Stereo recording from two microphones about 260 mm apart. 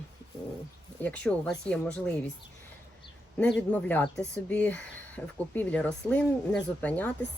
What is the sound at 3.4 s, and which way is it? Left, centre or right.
Speech, centre.